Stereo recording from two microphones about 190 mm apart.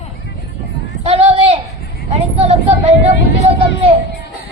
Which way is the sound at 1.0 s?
30° right (ahead or behind).